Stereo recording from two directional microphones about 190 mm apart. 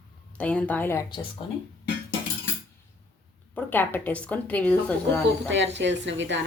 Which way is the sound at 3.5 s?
10° left (ahead or behind).